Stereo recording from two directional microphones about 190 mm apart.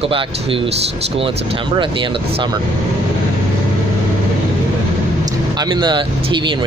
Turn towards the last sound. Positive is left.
turn(degrees=-25)  # may be behind; listen again after turning